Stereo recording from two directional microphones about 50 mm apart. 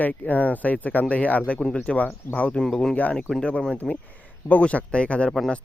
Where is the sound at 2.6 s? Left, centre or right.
Centre.